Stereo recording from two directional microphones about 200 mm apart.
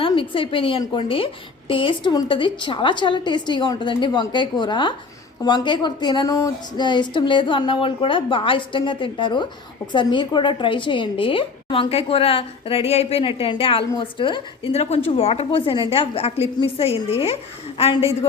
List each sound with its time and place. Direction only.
0.0 s a woman's voice: 25° left (ahead or behind)